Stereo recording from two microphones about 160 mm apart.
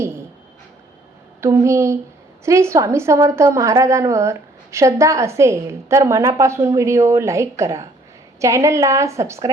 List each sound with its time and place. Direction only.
1.4 s a woman's voice: 15° right (ahead or behind)